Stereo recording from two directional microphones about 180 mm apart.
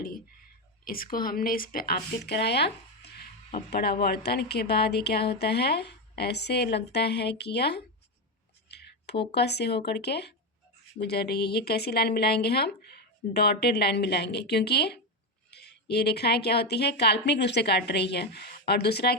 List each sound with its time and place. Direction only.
0.9 s speech: 55° left (ahead or behind)